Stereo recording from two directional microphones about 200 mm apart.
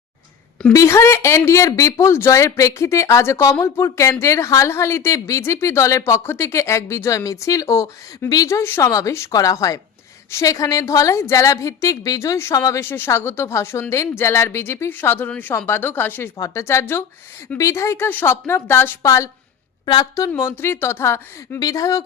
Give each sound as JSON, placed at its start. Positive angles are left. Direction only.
{"t": 0.7, "sound": "speech", "side_deg": 15}